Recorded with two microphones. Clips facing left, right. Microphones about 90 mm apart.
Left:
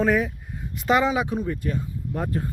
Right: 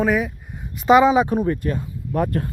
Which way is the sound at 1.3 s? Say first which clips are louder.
Right 6 dB; 55° right (ahead or behind).